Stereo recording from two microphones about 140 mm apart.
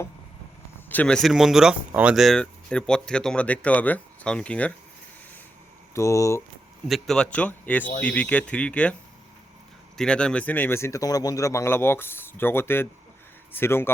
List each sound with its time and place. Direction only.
0.9 s speech: 10° left (ahead or behind)
5.9 s speech: 20° left (ahead or behind)
6.8 s speech: centre (ahead or behind)
10.0 s speech: 5° left (ahead or behind)